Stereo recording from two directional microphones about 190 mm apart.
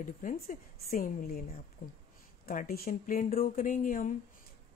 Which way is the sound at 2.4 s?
50° left (ahead or behind).